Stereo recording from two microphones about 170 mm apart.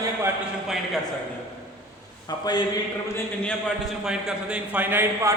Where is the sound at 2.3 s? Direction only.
25° left (ahead or behind).